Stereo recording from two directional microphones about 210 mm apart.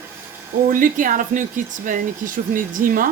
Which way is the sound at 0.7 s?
40° right (ahead or behind).